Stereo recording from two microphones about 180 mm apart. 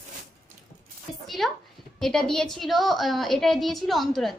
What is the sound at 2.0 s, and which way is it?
A woman's voice, 5° left (ahead or behind).